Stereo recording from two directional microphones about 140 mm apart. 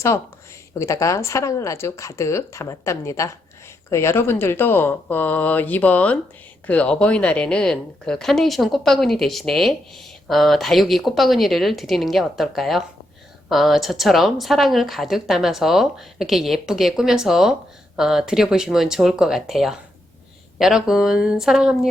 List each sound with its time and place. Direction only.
0.8 s a woman's voice: 20° left (ahead or behind); by 21.8 s 5° right (ahead or behind)